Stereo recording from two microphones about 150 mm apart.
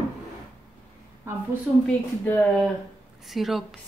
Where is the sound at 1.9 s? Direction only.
10° left (ahead or behind).